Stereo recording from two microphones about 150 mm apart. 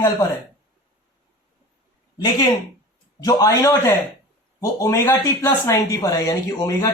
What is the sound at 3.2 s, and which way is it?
Speech, 20° left (ahead or behind).